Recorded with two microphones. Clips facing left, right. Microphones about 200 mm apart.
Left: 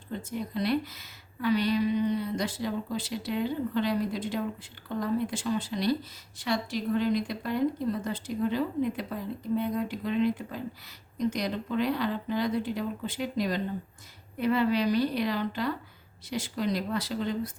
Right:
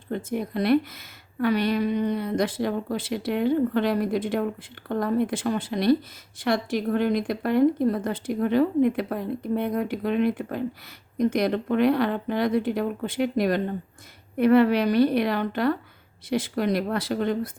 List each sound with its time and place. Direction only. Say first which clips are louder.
0.1 s a woman's voice: right 6 dB; 60° right (ahead or behind)